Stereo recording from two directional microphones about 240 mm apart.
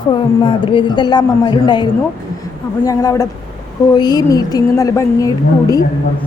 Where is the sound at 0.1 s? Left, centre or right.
Left.